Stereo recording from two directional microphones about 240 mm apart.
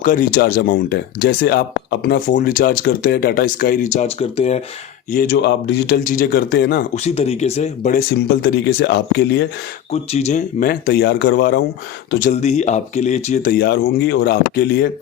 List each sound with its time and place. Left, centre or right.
0.0 s speech: left
5.1 s speech: left
6.0 s speech: left
6.9 s speech: left
8.3 s speech: left
9.9 s speech: left
12.2 s speech: left